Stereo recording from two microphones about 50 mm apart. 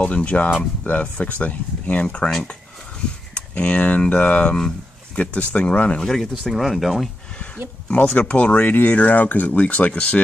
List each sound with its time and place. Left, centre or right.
0.0 s speech: left
3.3 s speech: left
6.0 s speech: centre
7.9 s speech: left